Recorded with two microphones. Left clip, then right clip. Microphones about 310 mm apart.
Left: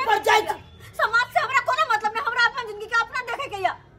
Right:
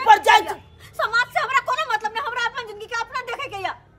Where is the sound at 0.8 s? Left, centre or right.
Centre.